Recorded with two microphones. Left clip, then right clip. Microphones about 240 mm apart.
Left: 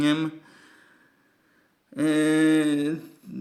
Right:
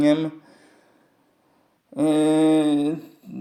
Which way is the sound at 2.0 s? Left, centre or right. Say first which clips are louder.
Right 3 dB; centre.